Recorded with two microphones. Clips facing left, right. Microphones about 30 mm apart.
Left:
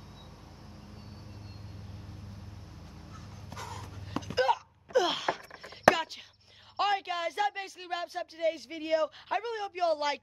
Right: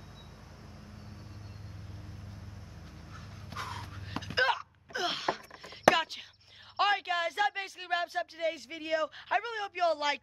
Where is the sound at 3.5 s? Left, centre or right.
Right.